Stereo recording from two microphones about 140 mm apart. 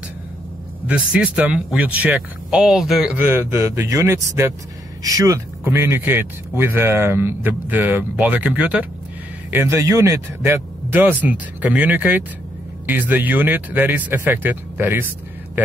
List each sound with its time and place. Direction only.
0.8 s speech: 10° right (ahead or behind)